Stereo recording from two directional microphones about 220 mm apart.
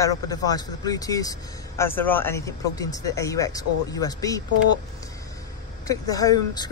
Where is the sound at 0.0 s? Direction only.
15° left (ahead or behind).